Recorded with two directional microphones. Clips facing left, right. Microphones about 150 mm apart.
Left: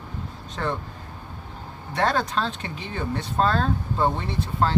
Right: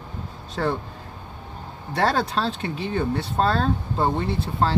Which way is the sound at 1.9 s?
35° right (ahead or behind).